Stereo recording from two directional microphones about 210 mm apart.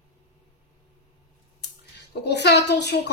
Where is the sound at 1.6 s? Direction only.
55° left (ahead or behind).